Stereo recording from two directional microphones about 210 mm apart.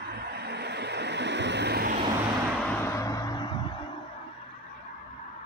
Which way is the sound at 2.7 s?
15° left (ahead or behind).